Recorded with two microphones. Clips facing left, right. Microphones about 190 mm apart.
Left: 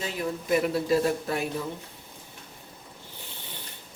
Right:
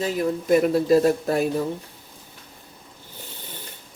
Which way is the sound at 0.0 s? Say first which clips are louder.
Right 7 dB; 45° right (ahead or behind).